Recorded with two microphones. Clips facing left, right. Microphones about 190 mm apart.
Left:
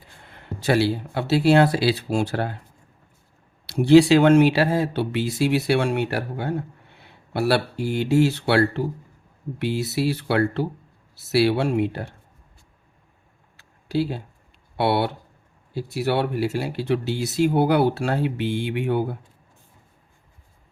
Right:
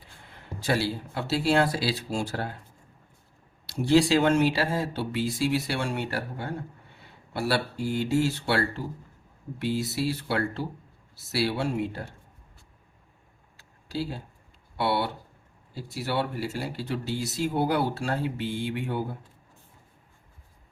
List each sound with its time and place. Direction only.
0.6 s speech: 70° left (ahead or behind)
3.7 s speech: 70° left (ahead or behind)
13.6 s a sound: 65° left (ahead or behind)
14.8 s speech: 65° left (ahead or behind)